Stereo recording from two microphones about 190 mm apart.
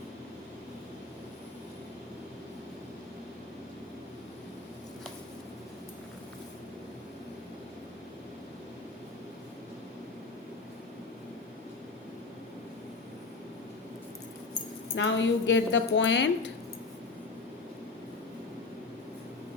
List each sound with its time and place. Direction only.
14.9 s a woman's voice: 75° left (ahead or behind)